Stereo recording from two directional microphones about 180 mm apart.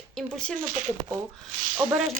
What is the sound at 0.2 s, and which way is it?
Speech, 5° left (ahead or behind).